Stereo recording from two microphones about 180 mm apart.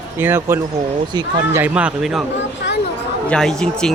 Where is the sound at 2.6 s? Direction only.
70° left (ahead or behind).